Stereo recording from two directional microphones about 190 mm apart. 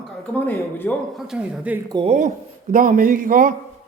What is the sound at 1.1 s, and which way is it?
Speech, centre (ahead or behind).